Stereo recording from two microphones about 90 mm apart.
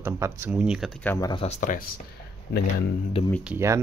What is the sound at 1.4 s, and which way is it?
Speech, 90° left.